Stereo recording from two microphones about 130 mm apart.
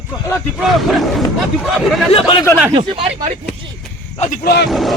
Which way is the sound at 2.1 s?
40° left (ahead or behind).